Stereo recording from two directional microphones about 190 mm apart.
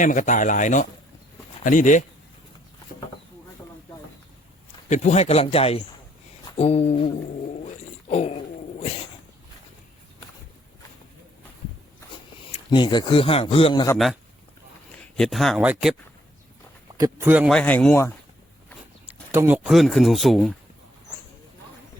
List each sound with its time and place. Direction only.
0.0 s speech: 40° left (ahead or behind)
4.9 s speech: 35° left (ahead or behind)
6.4 s a sound: 30° left (ahead or behind)
7.6 s speech: 35° left (ahead or behind)
12.5 s speech: 25° left (ahead or behind)
14.9 s speech: 5° left (ahead or behind)
17.0 s speech: 10° right (ahead or behind)
17.5 s speech: 10° left (ahead or behind)
19.0 s a sound: 10° right (ahead or behind)
19.5 s speech: centre (ahead or behind)